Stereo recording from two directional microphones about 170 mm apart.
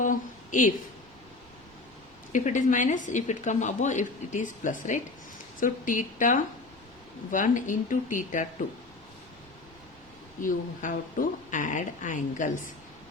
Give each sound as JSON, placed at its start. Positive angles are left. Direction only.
{"t": 0.0, "sound": "a sound", "side_deg": 50}
{"t": 2.3, "sound": "a woman's voice", "side_deg": 45}
{"t": 10.4, "sound": "a woman's voice", "side_deg": 50}